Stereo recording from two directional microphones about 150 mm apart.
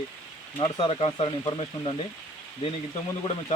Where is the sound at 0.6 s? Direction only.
35° left (ahead or behind).